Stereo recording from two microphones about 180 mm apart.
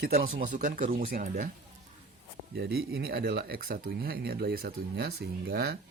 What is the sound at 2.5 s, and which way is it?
Speech, 60° right (ahead or behind).